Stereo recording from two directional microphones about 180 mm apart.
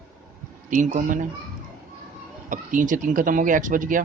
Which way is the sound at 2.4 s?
45° right (ahead or behind).